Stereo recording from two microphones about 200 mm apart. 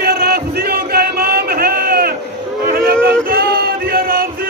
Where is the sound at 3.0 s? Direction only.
50° right (ahead or behind).